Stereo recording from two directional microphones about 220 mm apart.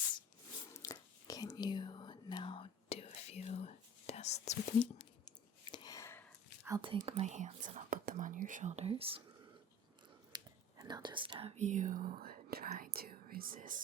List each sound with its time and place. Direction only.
0.8 s whispering: 15° left (ahead or behind)
5.7 s a sound: 15° left (ahead or behind)
6.7 s speech: 20° right (ahead or behind)
10.3 s speech: 20° right (ahead or behind); by 13.8 s 35° right (ahead or behind)